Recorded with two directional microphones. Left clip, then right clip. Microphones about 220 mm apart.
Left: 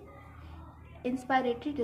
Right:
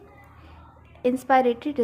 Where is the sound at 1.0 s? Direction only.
45° right (ahead or behind).